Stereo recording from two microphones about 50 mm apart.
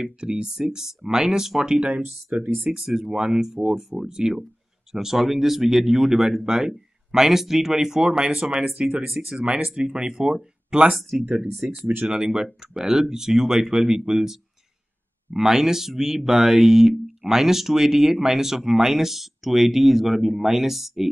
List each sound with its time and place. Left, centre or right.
0.0 s speech: centre
2.4 s speech: right
2.7 s speech: centre
11.0 s speech: centre